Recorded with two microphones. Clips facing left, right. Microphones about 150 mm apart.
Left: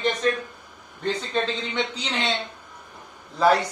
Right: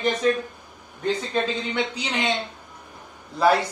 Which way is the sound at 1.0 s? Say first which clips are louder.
Right 1 dB; 10° right (ahead or behind).